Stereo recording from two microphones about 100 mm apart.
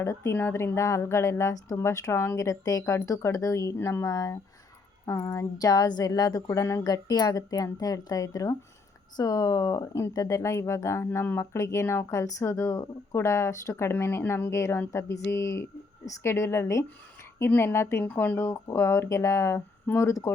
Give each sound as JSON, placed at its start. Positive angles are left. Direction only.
{"t": 0.0, "sound": "a woman's voice", "side_deg": 30}